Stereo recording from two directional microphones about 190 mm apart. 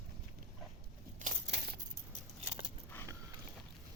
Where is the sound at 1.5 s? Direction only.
60° right (ahead or behind).